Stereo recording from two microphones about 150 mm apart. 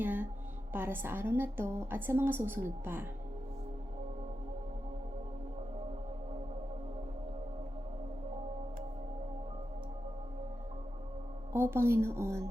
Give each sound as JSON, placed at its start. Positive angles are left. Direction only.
{"t": 0.0, "sound": "music", "side_deg": -10}
{"t": 0.7, "sound": "a woman's voice", "side_deg": -15}
{"t": 11.5, "sound": "a woman's voice", "side_deg": -15}